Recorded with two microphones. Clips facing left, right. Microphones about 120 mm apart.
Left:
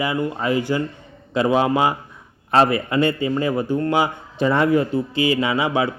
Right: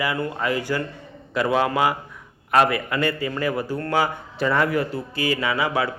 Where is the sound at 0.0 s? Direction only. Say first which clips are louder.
Left 2 dB; 20° left (ahead or behind).